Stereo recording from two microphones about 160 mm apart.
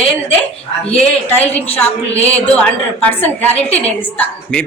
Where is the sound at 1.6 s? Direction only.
40° left (ahead or behind).